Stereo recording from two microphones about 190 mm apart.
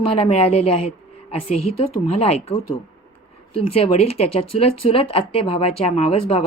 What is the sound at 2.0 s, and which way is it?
Speech, 35° left (ahead or behind).